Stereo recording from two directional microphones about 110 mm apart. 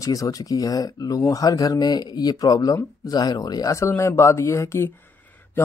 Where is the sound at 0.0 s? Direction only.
35° left (ahead or behind).